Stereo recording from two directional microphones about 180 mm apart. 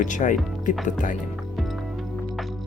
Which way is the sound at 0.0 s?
45° left (ahead or behind).